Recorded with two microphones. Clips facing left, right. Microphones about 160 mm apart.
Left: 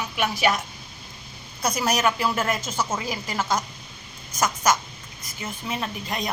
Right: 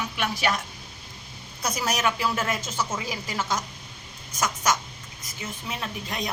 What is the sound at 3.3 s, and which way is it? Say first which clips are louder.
Speech: left 3 dB; 40° left (ahead or behind).